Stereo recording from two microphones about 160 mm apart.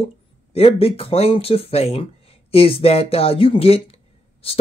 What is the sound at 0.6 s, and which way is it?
Speech, 35° left (ahead or behind).